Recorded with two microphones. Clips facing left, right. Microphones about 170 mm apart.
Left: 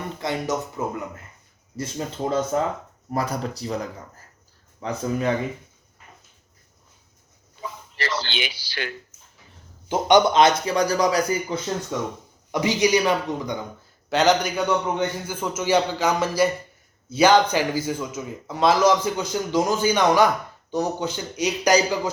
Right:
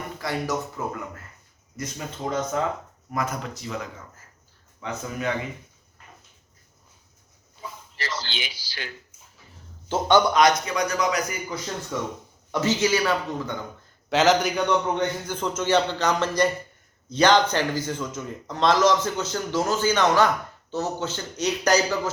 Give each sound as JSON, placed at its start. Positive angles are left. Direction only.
{"t": 0.2, "sound": "a man's voice", "side_deg": 20}
{"t": 1.7, "sound": "a man's voice", "side_deg": 30}
{"t": 7.6, "sound": "a sound", "side_deg": 65}
{"t": 9.9, "sound": "a man's voice", "side_deg": 20}
{"t": 12.5, "sound": "speech", "side_deg": 15}
{"t": 14.1, "sound": "speech", "side_deg": 0}